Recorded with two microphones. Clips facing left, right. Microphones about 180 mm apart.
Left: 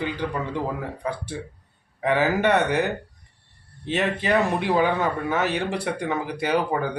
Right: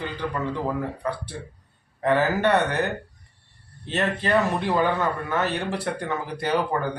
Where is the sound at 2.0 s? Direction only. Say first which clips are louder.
Even; 15° left (ahead or behind).